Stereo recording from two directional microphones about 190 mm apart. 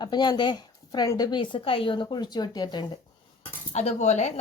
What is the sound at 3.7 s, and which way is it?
Speech, 35° left (ahead or behind).